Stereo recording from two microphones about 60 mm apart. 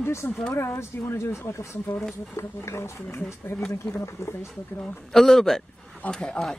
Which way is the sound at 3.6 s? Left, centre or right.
Centre.